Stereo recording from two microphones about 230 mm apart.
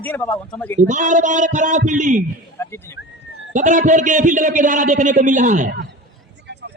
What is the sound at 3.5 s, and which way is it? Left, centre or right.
A man's voice, right.